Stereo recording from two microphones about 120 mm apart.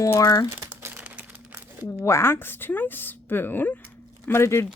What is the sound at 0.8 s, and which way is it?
Crumpling, 10° right (ahead or behind).